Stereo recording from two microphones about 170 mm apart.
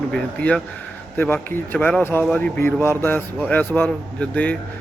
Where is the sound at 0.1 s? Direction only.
5° left (ahead or behind).